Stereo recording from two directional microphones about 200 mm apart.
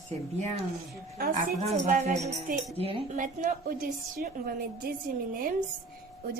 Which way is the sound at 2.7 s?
30° right (ahead or behind).